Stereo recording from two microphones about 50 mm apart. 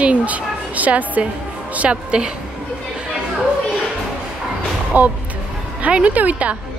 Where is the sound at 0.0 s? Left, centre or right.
Right.